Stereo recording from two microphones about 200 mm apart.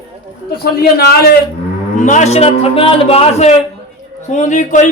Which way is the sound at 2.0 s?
35° left (ahead or behind).